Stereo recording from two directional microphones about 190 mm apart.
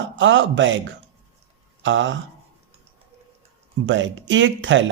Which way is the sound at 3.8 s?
80° right.